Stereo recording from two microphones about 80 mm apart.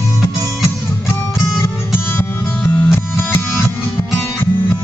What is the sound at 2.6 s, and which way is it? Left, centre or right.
Music, centre.